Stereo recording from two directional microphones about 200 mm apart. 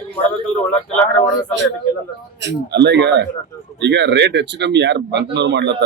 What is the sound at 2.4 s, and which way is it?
Speech, 60° right (ahead or behind).